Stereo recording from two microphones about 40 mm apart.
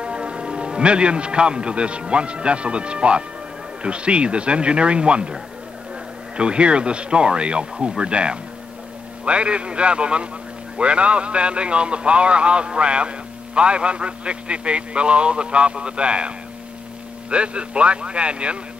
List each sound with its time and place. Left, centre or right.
0.0 s a man's voice: right
6.3 s a man's voice: right